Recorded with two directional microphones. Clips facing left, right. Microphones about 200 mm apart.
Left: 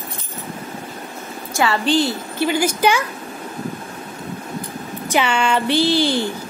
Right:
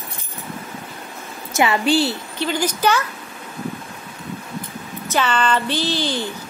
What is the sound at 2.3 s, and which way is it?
Speech, 10° left (ahead or behind).